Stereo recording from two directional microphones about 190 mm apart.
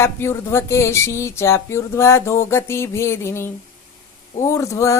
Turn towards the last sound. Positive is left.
turn(degrees=15)  # may be behind; listen again after turning